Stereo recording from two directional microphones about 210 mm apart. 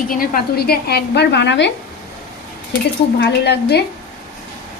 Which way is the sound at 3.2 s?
50° left (ahead or behind).